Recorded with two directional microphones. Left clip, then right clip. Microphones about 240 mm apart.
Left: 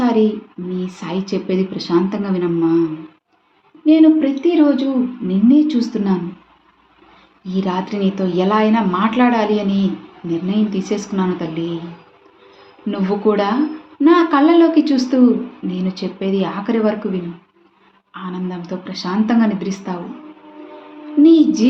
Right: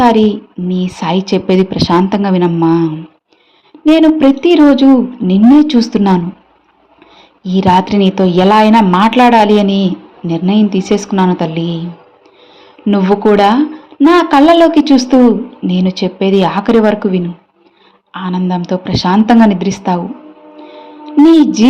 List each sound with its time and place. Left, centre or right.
0.0 s a woman's voice: right
3.8 s a woman's voice: right
7.4 s a woman's voice: right
12.9 s a woman's voice: right
21.3 s a woman's voice: right